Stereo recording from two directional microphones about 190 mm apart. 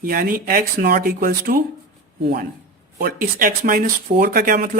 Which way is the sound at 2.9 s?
50° right (ahead or behind).